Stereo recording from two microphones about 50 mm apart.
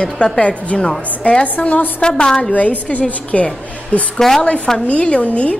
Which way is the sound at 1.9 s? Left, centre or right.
Centre.